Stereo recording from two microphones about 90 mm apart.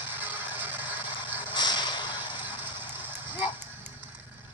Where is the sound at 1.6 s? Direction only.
55° left (ahead or behind).